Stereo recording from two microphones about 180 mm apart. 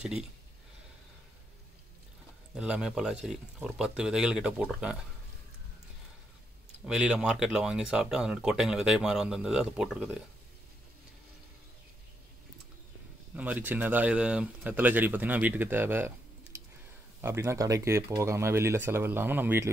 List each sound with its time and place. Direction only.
0.0 s speech: 5° right (ahead or behind)
2.5 s speech: 5° right (ahead or behind)
6.9 s speech: 5° right (ahead or behind)
13.4 s speech: 10° right (ahead or behind)
17.2 s speech: 15° right (ahead or behind)